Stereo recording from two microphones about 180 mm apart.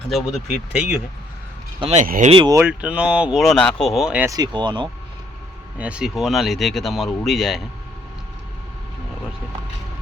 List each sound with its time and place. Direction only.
0.1 s speech: centre (ahead or behind)
1.8 s speech: 35° right (ahead or behind)
2.0 s speech: 50° right (ahead or behind)
2.3 s speech: 25° right (ahead or behind)
2.6 s speech: 10° right (ahead or behind)
4.3 s speech: 20° right (ahead or behind)
5.7 s speech: 5° right (ahead or behind)